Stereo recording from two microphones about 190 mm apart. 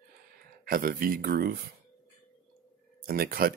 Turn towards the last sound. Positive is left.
turn(degrees=-50)  # may be behind; listen again after turning